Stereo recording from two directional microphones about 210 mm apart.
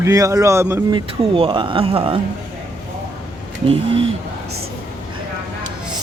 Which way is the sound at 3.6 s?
25° right (ahead or behind).